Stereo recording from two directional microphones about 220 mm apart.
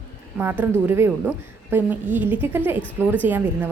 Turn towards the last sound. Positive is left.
turn(degrees=-10)  # may be behind; listen again after turning